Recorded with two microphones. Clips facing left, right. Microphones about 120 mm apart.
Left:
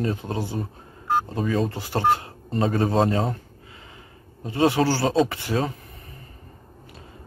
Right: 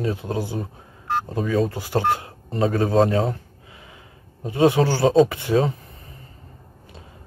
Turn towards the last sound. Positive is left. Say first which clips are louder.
# right 5 dB
turn(degrees=-20)  # may be behind; listen again after turning